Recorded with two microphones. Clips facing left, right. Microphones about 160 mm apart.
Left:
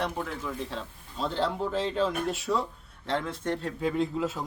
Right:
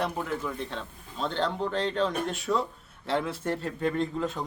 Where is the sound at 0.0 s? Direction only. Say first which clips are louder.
Right 2 dB; centre (ahead or behind).